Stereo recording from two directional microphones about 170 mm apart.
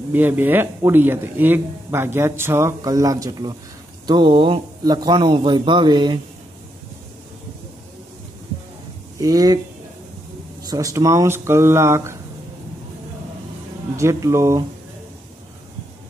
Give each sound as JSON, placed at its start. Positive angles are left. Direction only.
{"t": 0.1, "sound": "speech", "side_deg": -10}
{"t": 9.2, "sound": "speech", "side_deg": -20}
{"t": 10.7, "sound": "speech", "side_deg": -20}
{"t": 13.9, "sound": "speech", "side_deg": -15}